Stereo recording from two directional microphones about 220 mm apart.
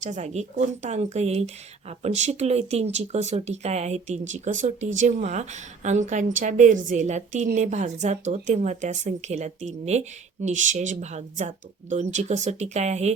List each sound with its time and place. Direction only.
0.0 s speech: 30° right (ahead or behind)